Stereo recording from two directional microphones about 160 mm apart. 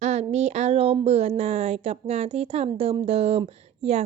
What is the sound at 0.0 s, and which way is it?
A woman's voice, 45° right (ahead or behind).